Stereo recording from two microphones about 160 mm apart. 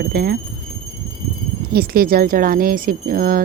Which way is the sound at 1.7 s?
70° right (ahead or behind).